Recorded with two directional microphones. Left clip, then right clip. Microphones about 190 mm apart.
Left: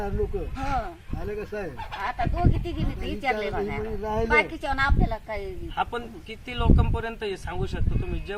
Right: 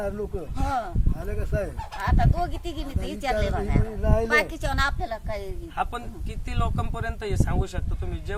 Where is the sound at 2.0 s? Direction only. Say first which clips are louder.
Right 1 dB; 5° right (ahead or behind).